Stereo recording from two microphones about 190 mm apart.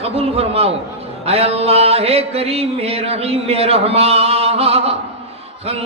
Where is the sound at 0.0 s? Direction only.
30° right (ahead or behind).